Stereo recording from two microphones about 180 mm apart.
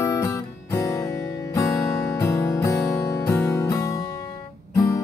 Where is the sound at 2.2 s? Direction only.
15° left (ahead or behind).